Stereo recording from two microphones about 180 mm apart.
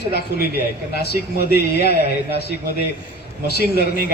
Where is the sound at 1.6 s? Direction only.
65° left (ahead or behind).